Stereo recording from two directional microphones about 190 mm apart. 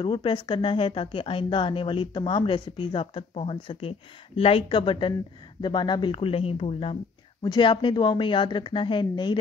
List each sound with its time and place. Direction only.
0.0 s speech: 25° left (ahead or behind)